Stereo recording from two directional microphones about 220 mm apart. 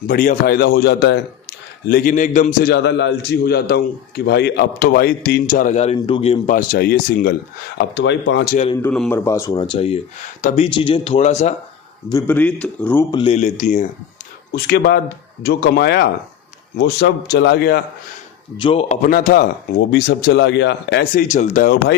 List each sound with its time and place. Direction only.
0.1 s a man's voice: 40° left (ahead or behind)
7.8 s a man's voice: 55° left (ahead or behind)
8.7 s speech: 10° left (ahead or behind); by 11.5 s 30° left (ahead or behind)
12.0 s speech: 15° left (ahead or behind)
13.1 s a man's voice: 25° left (ahead or behind)
14.5 s a man's voice: 45° left (ahead or behind)
18.5 s a man's voice: 25° left (ahead or behind); by 19.5 s 40° left (ahead or behind)
19.9 s a man's voice: 50° left (ahead or behind)